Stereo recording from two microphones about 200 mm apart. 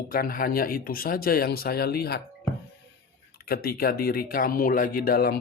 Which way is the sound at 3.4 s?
50° left (ahead or behind).